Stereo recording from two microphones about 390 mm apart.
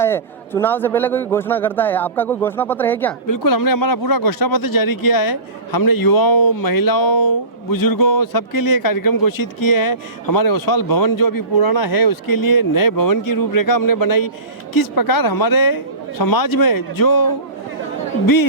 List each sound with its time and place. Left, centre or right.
0.0 s a man's voice: centre
3.2 s speech: left